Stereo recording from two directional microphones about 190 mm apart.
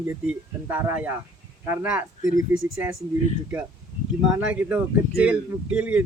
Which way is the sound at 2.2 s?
45° left (ahead or behind).